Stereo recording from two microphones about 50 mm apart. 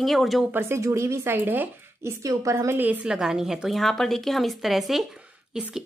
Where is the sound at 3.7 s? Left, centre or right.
Centre.